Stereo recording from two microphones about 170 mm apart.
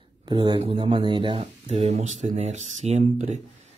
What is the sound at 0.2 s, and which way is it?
Speech, 30° right (ahead or behind).